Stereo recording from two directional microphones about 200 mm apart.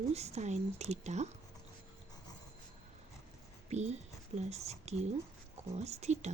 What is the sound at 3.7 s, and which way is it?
Speech, 35° right (ahead or behind).